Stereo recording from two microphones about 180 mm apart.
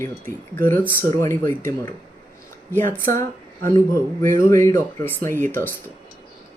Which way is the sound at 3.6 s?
15° left (ahead or behind).